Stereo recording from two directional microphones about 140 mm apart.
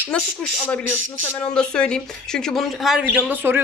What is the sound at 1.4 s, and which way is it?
Speech, 5° left (ahead or behind).